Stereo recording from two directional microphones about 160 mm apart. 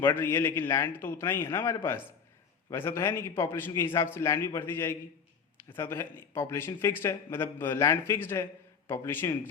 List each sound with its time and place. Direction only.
0.0 s a man's voice: 15° left (ahead or behind)